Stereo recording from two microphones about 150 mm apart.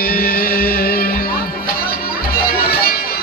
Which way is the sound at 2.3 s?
90° left.